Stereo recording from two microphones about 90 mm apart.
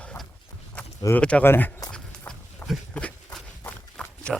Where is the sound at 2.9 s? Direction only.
15° left (ahead or behind).